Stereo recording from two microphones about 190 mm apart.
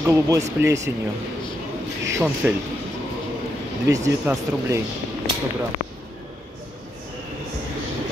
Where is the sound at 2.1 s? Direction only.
10° right (ahead or behind).